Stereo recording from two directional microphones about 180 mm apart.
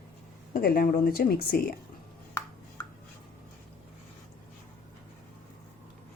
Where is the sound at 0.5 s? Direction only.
55° left (ahead or behind).